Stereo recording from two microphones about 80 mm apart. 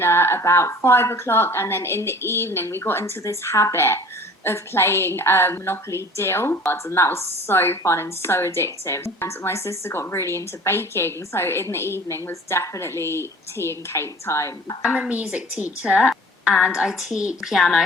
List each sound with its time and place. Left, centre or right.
0.0 s a woman's voice: left
14.8 s a woman's voice: centre